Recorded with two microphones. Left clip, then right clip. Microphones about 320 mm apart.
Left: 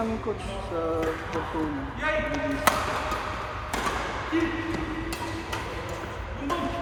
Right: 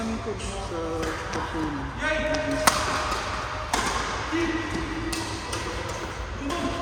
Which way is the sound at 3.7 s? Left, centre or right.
Centre.